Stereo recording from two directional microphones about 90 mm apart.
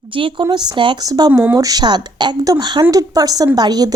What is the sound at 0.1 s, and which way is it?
Speech, 75° right (ahead or behind).